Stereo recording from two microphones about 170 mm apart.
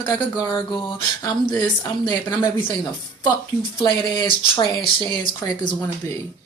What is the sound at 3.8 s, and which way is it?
Speech, 25° left (ahead or behind).